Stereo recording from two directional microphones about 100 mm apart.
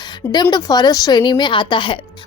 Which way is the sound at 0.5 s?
45° left (ahead or behind).